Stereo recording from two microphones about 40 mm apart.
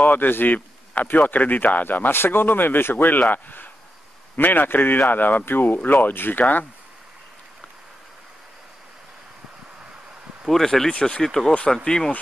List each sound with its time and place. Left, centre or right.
0.0 s speech: left
3.2 s a man's voice: left
10.4 s speech: centre
10.9 s speech: left
11.2 s speech: centre